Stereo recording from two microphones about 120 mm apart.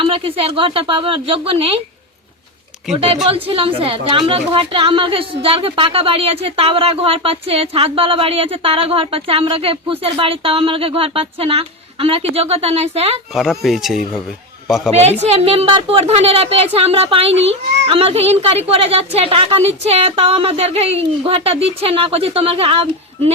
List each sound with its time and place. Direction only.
0.0 s a woman's voice: 50° right (ahead or behind)
3.2 s a woman's voice: 50° right (ahead or behind)
13.3 s speech: centre (ahead or behind)
15.2 s speech: 60° right (ahead or behind)